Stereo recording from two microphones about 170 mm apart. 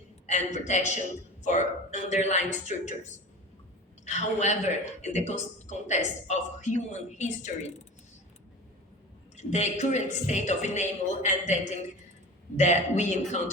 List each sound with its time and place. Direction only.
0.3 s a man's voice: 45° left (ahead or behind)
9.3 s a man's voice: 40° left (ahead or behind)